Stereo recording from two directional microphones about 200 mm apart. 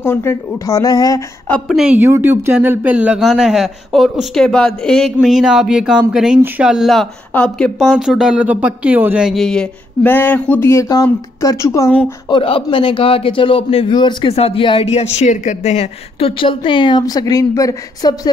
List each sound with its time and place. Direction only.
0.0 s speech: 10° left (ahead or behind)
1.5 s a woman's voice: centre (ahead or behind)
12.3 s a man's voice: 25° left (ahead or behind)